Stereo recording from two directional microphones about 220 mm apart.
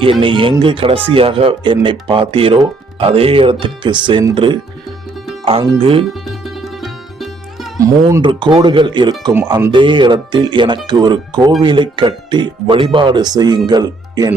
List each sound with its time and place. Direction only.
0.0 s speech: 25° right (ahead or behind)
5.7 s speech: 25° right (ahead or behind)
6.2 s music: centre (ahead or behind)
7.8 s speech: 20° right (ahead or behind)